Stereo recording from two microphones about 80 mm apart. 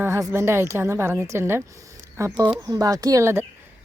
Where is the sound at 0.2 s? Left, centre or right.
Right.